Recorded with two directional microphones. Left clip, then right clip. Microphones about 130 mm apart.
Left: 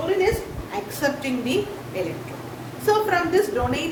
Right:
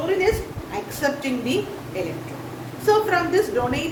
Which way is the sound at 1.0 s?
30° left (ahead or behind).